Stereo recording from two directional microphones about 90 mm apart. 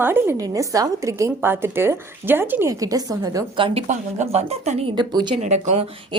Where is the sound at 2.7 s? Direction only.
40° right (ahead or behind).